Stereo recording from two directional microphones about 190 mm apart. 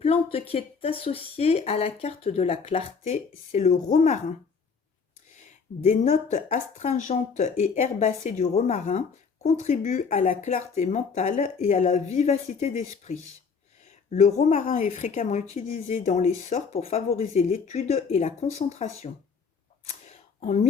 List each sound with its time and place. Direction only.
0.0 s speech: 30° left (ahead or behind)
5.8 s speech: 35° left (ahead or behind)
19.8 s a sound: 35° left (ahead or behind)